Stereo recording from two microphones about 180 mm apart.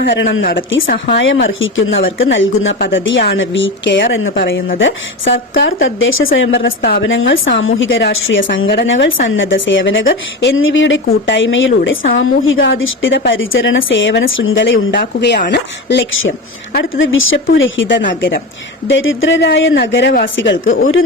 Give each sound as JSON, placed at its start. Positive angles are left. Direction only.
{"t": 0.9, "sound": "a woman's voice", "side_deg": 50}
{"t": 1.5, "sound": "speech", "side_deg": 90}
{"t": 6.8, "sound": "speech", "side_deg": 75}
{"t": 10.1, "sound": "speech", "side_deg": 80}
{"t": 18.2, "sound": "speech", "side_deg": 55}
{"t": 18.9, "sound": "speech", "side_deg": 90}
{"t": 19.7, "sound": "speech", "side_deg": 80}